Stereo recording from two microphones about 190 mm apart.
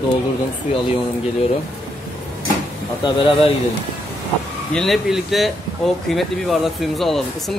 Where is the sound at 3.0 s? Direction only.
25° left (ahead or behind).